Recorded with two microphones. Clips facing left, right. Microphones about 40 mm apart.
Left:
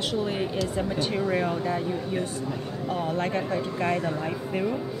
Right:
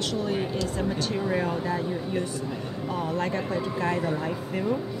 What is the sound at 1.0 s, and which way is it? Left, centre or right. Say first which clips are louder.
Speech: left 3 dB; centre.